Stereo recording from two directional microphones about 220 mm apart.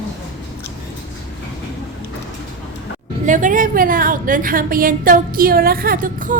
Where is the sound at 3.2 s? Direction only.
35° right (ahead or behind).